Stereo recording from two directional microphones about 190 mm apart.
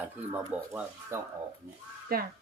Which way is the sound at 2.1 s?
50° right (ahead or behind).